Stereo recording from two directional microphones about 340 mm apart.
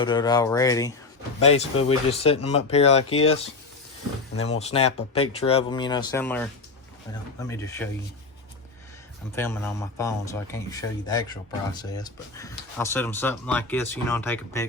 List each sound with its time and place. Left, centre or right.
0.0 s a man's voice: centre
4.4 s a man's voice: centre
9.3 s a man's voice: centre